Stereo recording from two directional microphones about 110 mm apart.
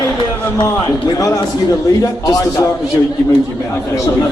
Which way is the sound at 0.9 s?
30° left (ahead or behind).